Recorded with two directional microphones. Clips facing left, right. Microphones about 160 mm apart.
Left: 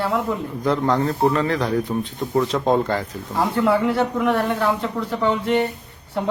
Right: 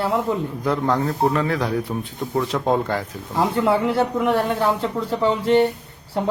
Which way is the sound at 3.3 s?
25° right (ahead or behind).